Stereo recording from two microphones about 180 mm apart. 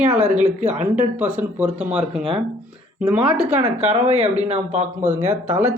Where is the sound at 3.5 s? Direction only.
40° right (ahead or behind).